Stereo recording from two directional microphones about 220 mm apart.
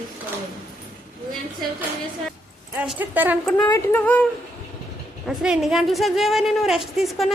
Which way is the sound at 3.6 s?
15° left (ahead or behind).